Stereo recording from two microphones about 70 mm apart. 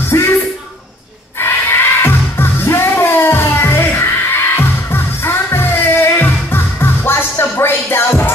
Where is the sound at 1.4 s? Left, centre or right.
Left.